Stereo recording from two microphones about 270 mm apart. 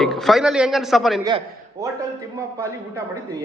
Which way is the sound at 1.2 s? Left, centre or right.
Centre.